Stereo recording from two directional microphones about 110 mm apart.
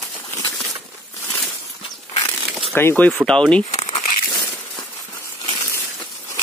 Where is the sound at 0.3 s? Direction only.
30° left (ahead or behind).